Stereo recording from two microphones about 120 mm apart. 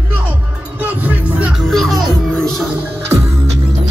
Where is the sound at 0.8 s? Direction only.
15° right (ahead or behind).